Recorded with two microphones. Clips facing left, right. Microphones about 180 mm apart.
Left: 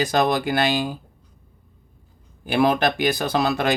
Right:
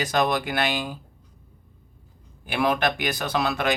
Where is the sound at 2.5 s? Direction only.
35° left (ahead or behind).